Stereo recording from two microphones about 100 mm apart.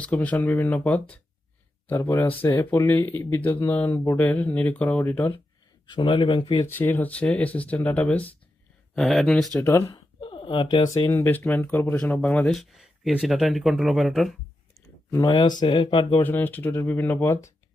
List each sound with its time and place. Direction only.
0.0 s speech: 15° left (ahead or behind)
5.9 s speech: 55° left (ahead or behind)
6.7 s speech: 20° left (ahead or behind)
9.0 s speech: 5° left (ahead or behind)
9.6 s speech: 25° left (ahead or behind)
9.9 s a sound: 55° left (ahead or behind)
10.8 s speech: 35° left (ahead or behind)
11.1 s speech: 20° left (ahead or behind)
12.5 s speech: centre (ahead or behind)
15.3 s speech: 50° left (ahead or behind)
16.2 s speech: 20° left (ahead or behind)